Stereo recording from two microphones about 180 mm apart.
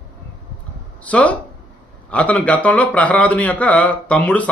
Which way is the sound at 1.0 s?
10° left (ahead or behind).